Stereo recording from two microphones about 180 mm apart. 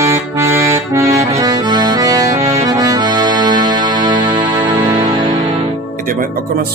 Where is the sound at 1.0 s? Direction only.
35° right (ahead or behind).